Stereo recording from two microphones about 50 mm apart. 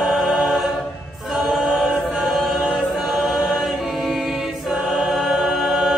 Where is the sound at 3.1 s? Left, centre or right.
Centre.